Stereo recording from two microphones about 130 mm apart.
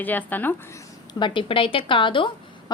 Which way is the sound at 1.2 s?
40° left (ahead or behind).